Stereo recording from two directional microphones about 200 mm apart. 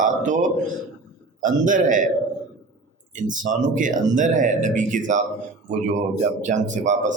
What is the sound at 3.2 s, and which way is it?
Speech, 40° right (ahead or behind).